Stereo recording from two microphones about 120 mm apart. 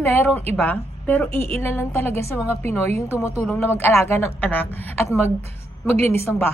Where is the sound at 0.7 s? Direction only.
15° left (ahead or behind).